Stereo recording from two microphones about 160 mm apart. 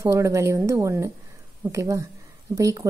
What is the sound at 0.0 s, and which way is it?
A woman's voice, 20° right (ahead or behind).